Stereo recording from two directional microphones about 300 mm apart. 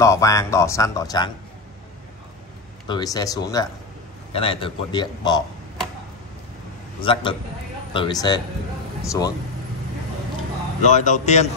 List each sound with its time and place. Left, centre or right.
0.0 s speech: centre
2.9 s speech: centre
7.0 s speech: centre
10.9 s a man's voice: left